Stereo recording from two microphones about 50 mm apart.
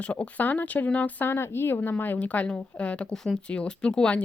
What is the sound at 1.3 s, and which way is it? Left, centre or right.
A woman's voice, left.